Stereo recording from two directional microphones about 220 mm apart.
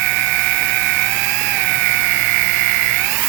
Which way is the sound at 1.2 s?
10° right (ahead or behind).